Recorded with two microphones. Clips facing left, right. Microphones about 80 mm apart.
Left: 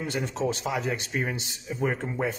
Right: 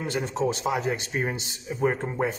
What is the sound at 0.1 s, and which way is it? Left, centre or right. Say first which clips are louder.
A man's voice: right 3 dB; right.